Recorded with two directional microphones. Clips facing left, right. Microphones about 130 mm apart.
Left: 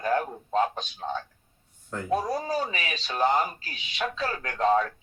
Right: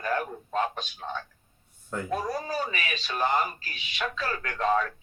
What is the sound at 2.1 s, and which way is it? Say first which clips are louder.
Speech: left 4 dB; 25° left (ahead or behind).